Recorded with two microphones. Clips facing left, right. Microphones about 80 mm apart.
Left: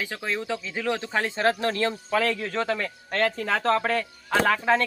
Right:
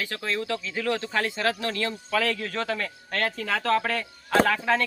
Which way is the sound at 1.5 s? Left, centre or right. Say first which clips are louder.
Left 4 dB; left.